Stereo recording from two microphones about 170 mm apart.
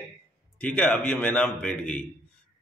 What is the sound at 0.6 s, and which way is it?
A man's voice, 10° left (ahead or behind).